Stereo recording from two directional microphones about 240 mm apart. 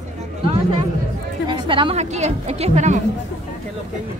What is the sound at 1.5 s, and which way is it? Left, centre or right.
A woman's voice, right.